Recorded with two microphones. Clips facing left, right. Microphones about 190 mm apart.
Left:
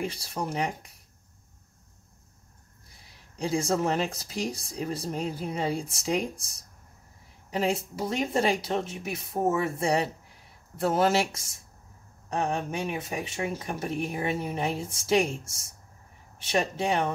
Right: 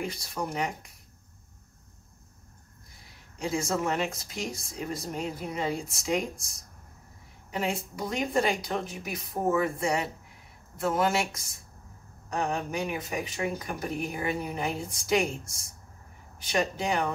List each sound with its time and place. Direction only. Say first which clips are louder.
0.0 s speech: left 1 dB; 30° left (ahead or behind)
3.3 s speech: left 3 dB; 30° left (ahead or behind)